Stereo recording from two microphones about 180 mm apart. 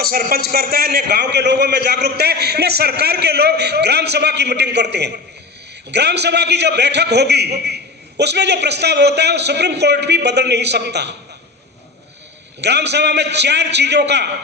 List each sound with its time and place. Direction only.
0.0 s a man's voice: 55° right (ahead or behind)
12.6 s a man's voice: 70° right (ahead or behind)